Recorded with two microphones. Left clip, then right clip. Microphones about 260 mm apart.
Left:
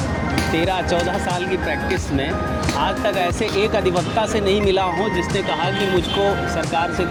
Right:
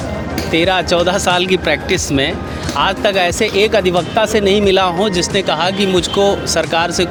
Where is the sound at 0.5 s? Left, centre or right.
Right.